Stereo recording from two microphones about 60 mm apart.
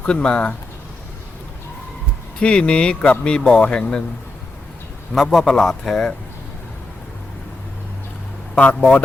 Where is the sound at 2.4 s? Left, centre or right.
Centre.